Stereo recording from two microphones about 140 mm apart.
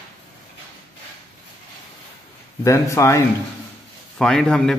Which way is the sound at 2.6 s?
20° left (ahead or behind).